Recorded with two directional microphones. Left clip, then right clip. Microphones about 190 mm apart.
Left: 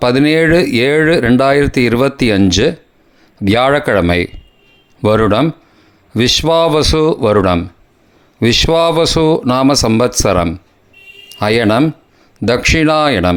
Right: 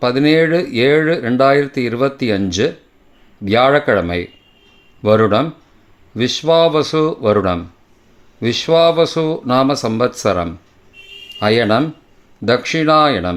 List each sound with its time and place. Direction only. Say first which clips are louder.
0.0 s speech: left 2 dB; 35° left (ahead or behind)